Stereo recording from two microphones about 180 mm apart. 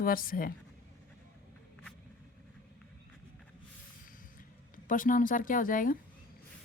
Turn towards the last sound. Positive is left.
turn(degrees=50)  # may be behind; listen again after turning